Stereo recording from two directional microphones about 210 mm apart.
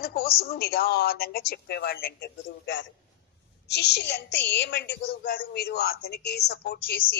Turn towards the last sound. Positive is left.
turn(degrees=45)  # may be behind; listen again after turning